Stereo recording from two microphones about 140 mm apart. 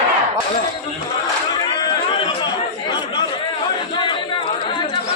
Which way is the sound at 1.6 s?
30° left (ahead or behind).